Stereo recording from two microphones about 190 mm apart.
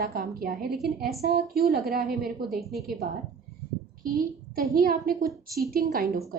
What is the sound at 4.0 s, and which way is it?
A woman's voice, 50° right (ahead or behind).